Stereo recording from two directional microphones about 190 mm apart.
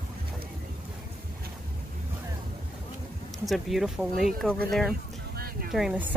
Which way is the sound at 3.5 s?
Centre (ahead or behind).